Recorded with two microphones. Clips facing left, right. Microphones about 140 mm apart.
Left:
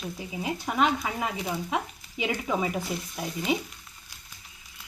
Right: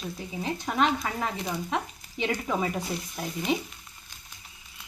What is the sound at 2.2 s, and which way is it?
Speech, 5° left (ahead or behind).